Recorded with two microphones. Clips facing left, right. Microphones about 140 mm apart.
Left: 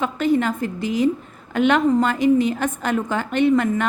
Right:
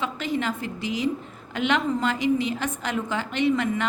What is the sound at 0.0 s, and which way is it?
A woman's voice, 50° left (ahead or behind).